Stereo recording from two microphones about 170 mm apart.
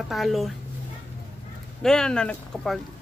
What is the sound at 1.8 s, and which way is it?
Speech, 5° left (ahead or behind).